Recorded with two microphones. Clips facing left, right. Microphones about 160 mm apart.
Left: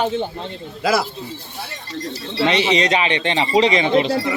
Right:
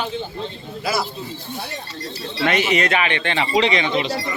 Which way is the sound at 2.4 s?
25° left (ahead or behind).